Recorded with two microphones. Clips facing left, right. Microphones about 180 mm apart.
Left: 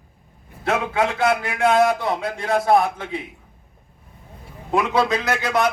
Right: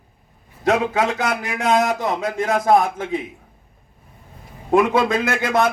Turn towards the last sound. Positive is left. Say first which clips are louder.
# right 2 dB
turn(degrees=-50)  # may be behind; listen again after turning